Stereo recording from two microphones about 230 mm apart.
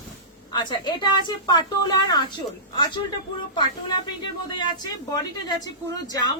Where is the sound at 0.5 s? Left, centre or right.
Centre.